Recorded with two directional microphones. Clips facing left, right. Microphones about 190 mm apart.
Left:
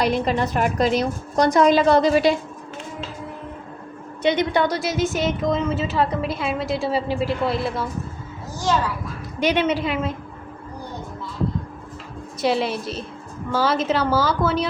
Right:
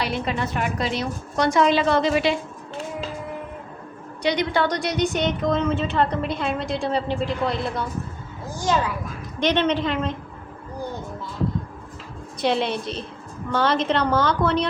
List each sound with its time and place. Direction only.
0.0 s a woman's voice: 40° left (ahead or behind)
4.2 s a woman's voice: 20° left (ahead or behind)
4.7 s a woman's voice: 5° left (ahead or behind)
9.4 s a woman's voice: 10° left (ahead or behind)
12.4 s a woman's voice: centre (ahead or behind)